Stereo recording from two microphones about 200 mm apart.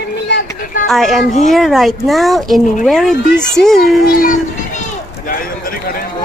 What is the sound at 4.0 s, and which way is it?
Speech, 45° left (ahead or behind).